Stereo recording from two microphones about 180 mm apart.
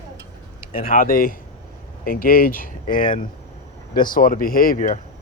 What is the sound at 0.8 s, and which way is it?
Speech, 50° left (ahead or behind).